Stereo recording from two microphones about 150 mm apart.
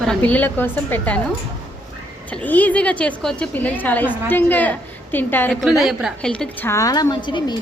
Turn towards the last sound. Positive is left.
turn(degrees=25)  # may be behind; listen again after turning